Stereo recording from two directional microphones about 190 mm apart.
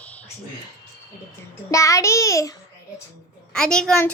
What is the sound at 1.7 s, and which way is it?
Speech, 15° left (ahead or behind).